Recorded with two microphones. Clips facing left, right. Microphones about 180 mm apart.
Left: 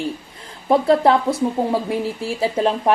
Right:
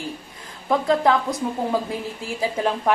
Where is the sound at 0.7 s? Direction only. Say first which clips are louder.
Left 4 dB; 30° left (ahead or behind).